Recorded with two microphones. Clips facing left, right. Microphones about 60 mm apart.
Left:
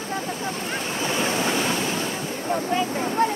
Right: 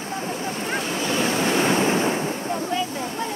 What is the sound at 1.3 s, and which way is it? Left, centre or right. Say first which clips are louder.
Waves: right 3 dB; right.